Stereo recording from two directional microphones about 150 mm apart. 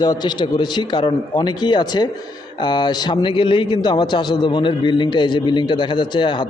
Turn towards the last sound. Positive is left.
turn(degrees=30)  # may be behind; listen again after turning